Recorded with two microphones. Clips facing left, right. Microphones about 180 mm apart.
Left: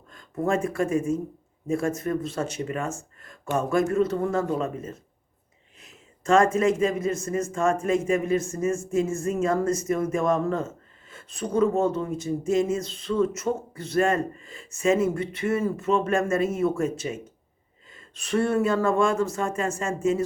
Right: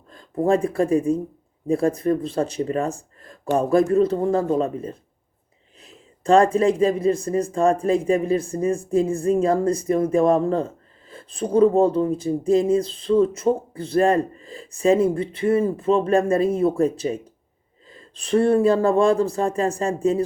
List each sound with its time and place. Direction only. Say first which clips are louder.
0.1 s speech: right 6 dB; 30° right (ahead or behind)